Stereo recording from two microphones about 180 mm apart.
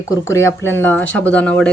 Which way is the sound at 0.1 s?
15° left (ahead or behind).